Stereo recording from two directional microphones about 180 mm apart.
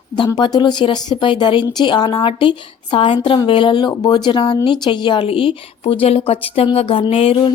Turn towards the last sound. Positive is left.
turn(degrees=30)  # may be behind; listen again after turning